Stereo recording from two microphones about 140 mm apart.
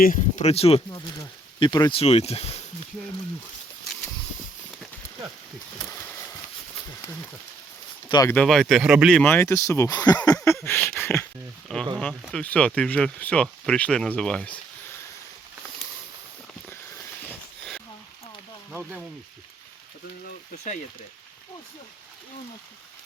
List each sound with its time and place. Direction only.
0.0 s speech: 70° left (ahead or behind)
0.4 s speech: 45° left (ahead or behind)
1.5 s speech: 30° left (ahead or behind)
2.0 s speech: 45° left (ahead or behind)
5.8 s a sound: 20° left (ahead or behind)
8.3 s speech: 5° left (ahead or behind)
9.2 s speech: 20° left (ahead or behind)
10.2 s a sound: 20° left (ahead or behind)
11.7 s a sound: 5° left (ahead or behind)
12.3 s speech: 10° left (ahead or behind)
17.2 s sniff: 5° left (ahead or behind)
18.7 s frying: 15° right (ahead or behind)